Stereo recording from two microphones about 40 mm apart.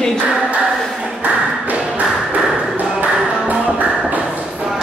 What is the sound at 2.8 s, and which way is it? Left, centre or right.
Ping, right.